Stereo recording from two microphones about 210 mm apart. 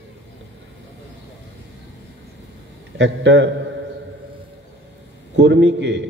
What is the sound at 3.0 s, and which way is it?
Speech, 60° right (ahead or behind).